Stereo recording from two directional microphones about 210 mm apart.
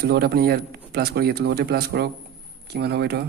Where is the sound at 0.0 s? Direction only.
50° right (ahead or behind).